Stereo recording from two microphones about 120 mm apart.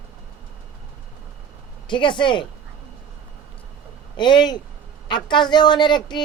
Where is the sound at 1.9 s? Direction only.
40° left (ahead or behind).